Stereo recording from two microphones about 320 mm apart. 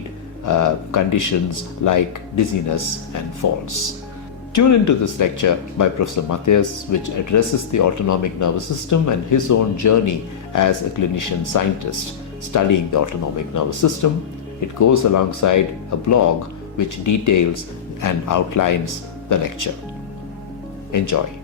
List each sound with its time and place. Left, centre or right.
0.4 s speech: left
20.9 s speech: left